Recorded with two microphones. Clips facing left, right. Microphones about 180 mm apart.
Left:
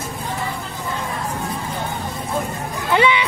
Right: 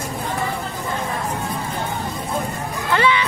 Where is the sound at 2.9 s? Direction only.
15° left (ahead or behind).